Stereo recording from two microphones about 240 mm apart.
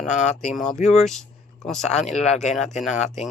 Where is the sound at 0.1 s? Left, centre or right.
Left.